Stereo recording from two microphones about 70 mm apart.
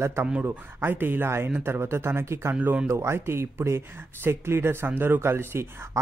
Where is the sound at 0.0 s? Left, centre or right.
Right.